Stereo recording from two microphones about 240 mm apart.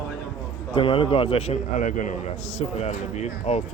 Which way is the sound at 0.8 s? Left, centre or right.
Left.